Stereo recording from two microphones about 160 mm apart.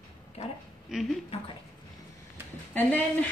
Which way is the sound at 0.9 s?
5° right (ahead or behind).